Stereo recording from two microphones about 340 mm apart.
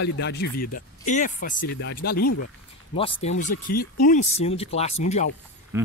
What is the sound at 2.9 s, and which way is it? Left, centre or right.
Speech, centre.